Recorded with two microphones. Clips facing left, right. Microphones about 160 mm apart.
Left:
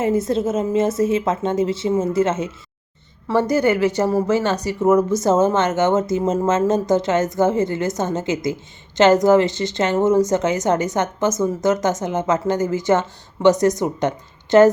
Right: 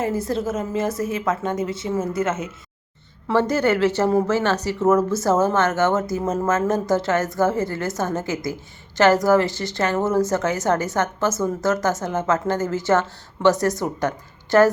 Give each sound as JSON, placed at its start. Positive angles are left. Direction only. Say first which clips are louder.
{"t": 0.0, "sound": "speech", "louder": "left 4 dB", "side_deg": 20}
{"t": 3.3, "sound": "speech", "louder": "left 2 dB", "side_deg": 15}